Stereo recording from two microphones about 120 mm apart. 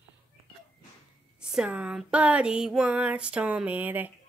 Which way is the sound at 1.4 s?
5° right (ahead or behind).